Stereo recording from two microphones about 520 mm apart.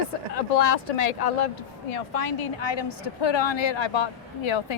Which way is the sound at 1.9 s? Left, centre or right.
Left.